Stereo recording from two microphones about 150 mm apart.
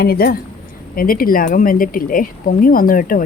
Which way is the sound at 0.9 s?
70° left (ahead or behind).